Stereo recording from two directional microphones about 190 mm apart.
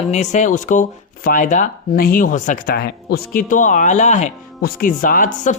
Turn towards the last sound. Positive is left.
turn(degrees=45)  # may be behind; listen again after turning